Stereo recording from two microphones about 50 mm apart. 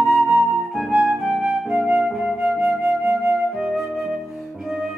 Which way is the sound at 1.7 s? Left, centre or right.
Right.